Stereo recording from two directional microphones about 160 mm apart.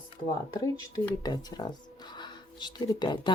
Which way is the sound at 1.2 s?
25° left (ahead or behind).